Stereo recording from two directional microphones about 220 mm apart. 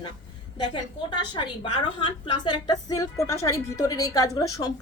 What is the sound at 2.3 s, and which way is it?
A woman's voice, 20° left (ahead or behind).